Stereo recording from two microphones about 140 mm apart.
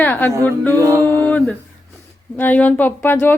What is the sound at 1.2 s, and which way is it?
A woman's voice, 10° left (ahead or behind).